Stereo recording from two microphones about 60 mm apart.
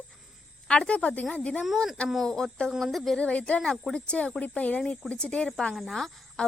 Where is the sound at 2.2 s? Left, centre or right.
Centre.